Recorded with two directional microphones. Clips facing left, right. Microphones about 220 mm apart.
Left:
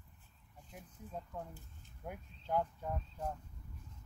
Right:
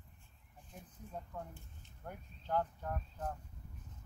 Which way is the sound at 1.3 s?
15° left (ahead or behind).